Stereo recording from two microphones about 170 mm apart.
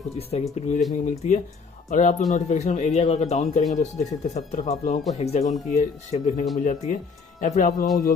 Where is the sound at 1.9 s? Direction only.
50° left (ahead or behind).